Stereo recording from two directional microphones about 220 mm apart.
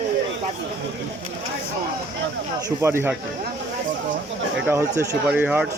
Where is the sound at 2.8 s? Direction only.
10° right (ahead or behind).